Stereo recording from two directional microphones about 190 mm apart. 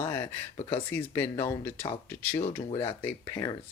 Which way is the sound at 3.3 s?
20° left (ahead or behind).